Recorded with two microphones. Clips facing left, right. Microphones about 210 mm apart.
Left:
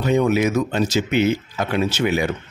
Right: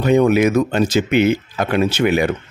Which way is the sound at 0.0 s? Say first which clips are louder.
Right 4 dB; 60° right (ahead or behind).